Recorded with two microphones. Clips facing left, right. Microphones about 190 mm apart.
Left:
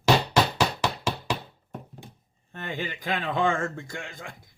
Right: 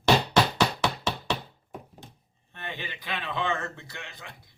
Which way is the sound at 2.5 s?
45° left (ahead or behind).